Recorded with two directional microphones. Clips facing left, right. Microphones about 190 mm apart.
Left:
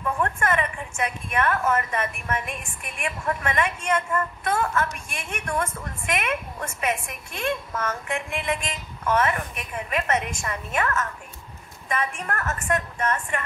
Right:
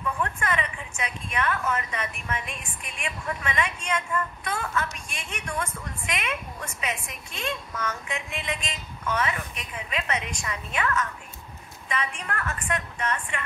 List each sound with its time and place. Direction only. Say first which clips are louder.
0.2 s a woman's voice: left 5 dB; 50° left (ahead or behind)